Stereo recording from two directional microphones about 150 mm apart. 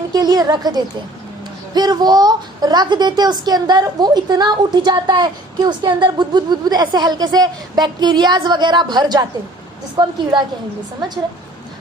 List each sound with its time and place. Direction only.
0.1 s a woman's voice: 25° right (ahead or behind)